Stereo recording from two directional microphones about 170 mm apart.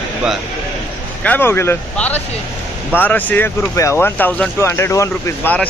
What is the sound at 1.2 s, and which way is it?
Speech, 15° left (ahead or behind).